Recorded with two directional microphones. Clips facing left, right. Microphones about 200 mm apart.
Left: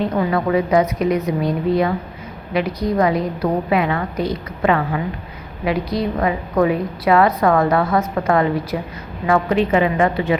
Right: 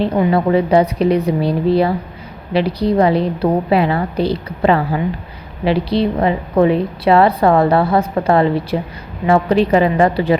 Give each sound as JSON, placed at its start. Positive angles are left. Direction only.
{"t": 0.0, "sound": "a woman's voice", "side_deg": -30}